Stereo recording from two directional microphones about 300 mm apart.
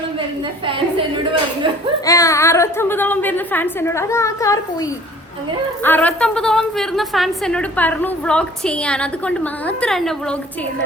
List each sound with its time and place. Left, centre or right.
0.6 s a woman's voice: centre
2.0 s a woman's voice: centre